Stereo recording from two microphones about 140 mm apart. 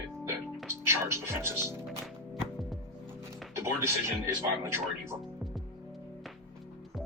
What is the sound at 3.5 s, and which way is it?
Speech, 20° right (ahead or behind).